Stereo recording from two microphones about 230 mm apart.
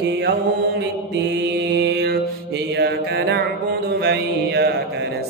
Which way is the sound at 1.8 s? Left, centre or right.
Right.